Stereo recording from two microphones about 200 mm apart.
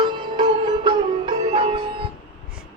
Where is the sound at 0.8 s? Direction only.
25° right (ahead or behind).